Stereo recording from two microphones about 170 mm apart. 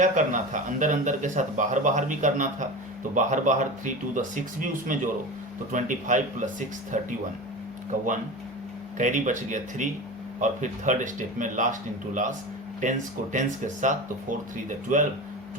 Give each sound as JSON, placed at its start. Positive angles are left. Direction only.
{"t": 0.0, "sound": "speech", "side_deg": -45}